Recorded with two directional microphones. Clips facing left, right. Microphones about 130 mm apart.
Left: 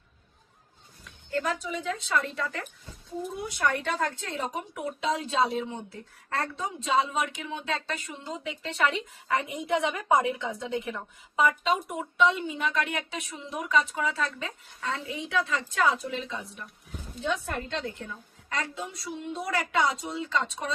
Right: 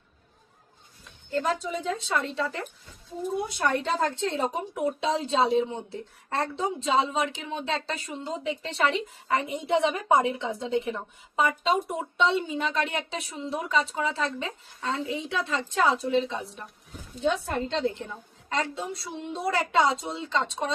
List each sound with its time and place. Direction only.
1.3 s a woman's voice: 25° right (ahead or behind)
3.6 s a woman's voice: 30° right (ahead or behind)